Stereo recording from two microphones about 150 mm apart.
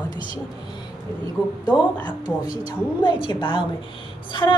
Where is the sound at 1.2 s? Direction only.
25° left (ahead or behind).